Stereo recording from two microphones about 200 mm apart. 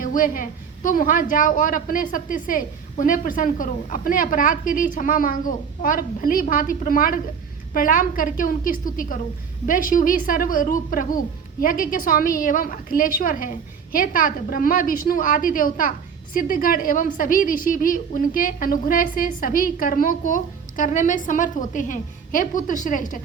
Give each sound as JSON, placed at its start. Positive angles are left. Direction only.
{"t": 0.0, "sound": "a woman's voice", "side_deg": 45}